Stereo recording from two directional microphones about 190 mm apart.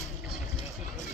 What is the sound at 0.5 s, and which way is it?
Run, 40° left (ahead or behind).